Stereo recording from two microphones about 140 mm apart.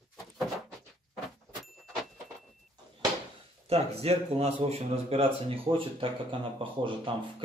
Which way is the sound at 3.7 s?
45° right (ahead or behind).